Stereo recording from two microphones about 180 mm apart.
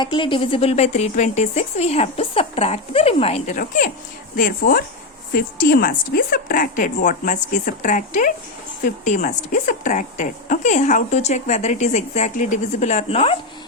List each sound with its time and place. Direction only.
0.0 s a woman's voice: 25° left (ahead or behind)